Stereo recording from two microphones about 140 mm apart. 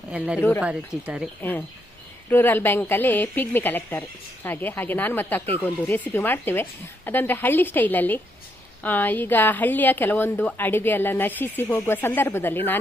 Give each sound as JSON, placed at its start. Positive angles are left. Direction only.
{"t": 0.3, "sound": "speech", "side_deg": 20}
{"t": 1.0, "sound": "speech", "side_deg": -10}
{"t": 1.4, "sound": "a woman's voice", "side_deg": 15}